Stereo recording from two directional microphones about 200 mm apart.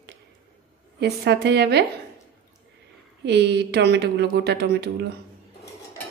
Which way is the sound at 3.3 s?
60° right (ahead or behind).